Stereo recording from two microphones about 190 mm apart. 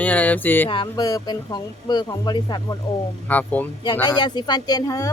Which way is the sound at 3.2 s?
10° left (ahead or behind).